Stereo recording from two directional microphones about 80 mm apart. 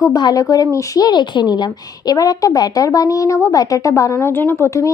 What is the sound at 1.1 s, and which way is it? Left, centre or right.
A woman's voice, left.